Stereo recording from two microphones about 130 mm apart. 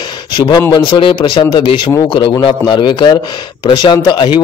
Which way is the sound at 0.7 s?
35° left (ahead or behind).